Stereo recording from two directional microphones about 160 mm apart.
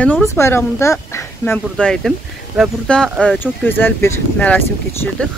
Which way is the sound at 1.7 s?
5° left (ahead or behind).